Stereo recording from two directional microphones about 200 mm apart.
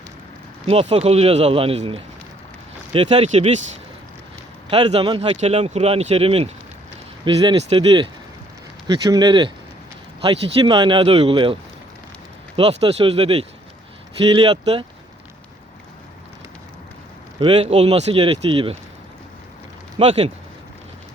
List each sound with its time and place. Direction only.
0.7 s speech: 30° right (ahead or behind)
4.7 s speech: 25° right (ahead or behind)
12.5 s speech: 25° right (ahead or behind)
17.4 s speech: 25° right (ahead or behind)
20.0 s speech: 30° right (ahead or behind)